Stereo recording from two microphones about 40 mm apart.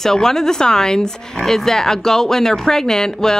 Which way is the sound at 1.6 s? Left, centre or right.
Centre.